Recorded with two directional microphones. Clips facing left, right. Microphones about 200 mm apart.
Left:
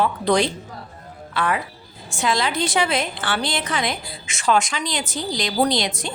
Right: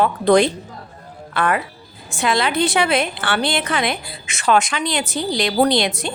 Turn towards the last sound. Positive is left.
turn(degrees=-60)  # may be behind; listen again after turning